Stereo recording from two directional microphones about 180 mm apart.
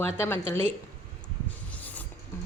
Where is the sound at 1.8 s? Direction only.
10° left (ahead or behind).